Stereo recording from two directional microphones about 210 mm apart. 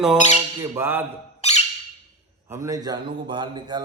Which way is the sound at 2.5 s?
15° right (ahead or behind).